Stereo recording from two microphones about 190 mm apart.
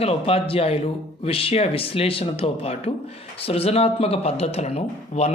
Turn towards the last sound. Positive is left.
turn(degrees=35)  # may be behind; listen again after turning